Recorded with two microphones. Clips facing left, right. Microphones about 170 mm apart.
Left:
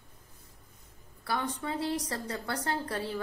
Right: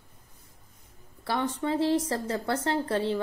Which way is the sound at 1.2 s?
25° right (ahead or behind).